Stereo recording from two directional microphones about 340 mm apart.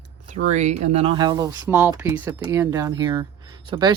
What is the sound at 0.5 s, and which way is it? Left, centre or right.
Speech, centre.